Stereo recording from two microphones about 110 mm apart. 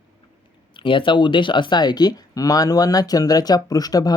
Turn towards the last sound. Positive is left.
turn(degrees=35)  # may be behind; listen again after turning